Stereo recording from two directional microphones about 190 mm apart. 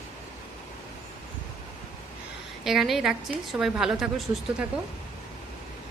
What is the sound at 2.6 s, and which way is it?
A woman's voice, centre (ahead or behind).